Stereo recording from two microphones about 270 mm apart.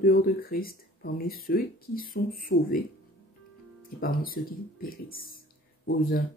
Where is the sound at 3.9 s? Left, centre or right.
Left.